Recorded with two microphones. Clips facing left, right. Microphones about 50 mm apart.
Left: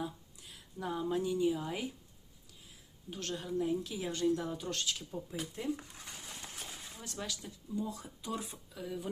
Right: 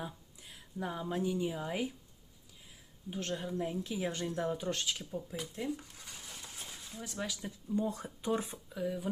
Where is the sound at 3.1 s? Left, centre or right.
Centre.